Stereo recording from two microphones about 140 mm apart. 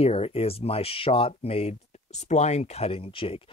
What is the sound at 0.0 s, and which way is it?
Speech, 45° left (ahead or behind).